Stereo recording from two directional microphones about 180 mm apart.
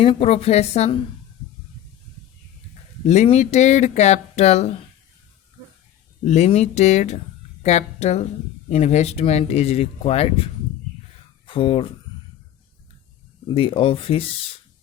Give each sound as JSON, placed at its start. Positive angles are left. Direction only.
{"t": 0.0, "sound": "speech", "side_deg": 30}
{"t": 3.1, "sound": "speech", "side_deg": 40}
{"t": 6.2, "sound": "speech", "side_deg": 40}
{"t": 13.5, "sound": "speech", "side_deg": 30}